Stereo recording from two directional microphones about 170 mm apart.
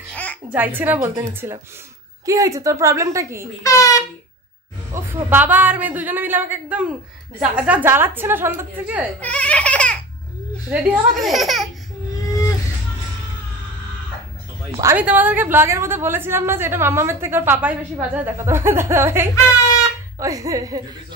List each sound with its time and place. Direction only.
0.1 s a sound: 10° left (ahead or behind)
0.5 s a woman's voice: 10° right (ahead or behind)
3.6 s speech: 20° left (ahead or behind)
4.9 s a woman's voice: 15° right (ahead or behind)
9.2 s speech: 10° left (ahead or behind)
10.7 s speech: 5° right (ahead or behind)
14.8 s a woman's voice: 15° right (ahead or behind)